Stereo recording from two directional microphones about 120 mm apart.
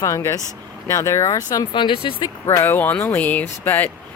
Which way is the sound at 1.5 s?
35° left (ahead or behind).